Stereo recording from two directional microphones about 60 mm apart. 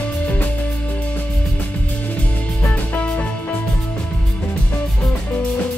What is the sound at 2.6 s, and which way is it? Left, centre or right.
Music, left.